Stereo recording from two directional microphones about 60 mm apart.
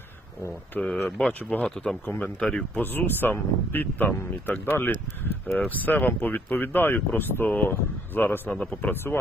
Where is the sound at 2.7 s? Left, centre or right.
Left.